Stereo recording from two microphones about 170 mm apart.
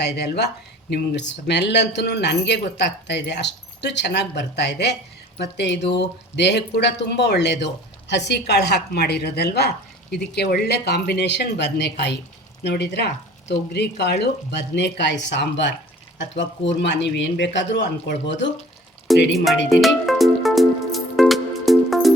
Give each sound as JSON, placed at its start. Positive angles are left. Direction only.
{"t": 0.0, "sound": "speech", "side_deg": 75}
{"t": 19.1, "sound": "speech", "side_deg": 0}
{"t": 19.7, "sound": "music", "side_deg": 0}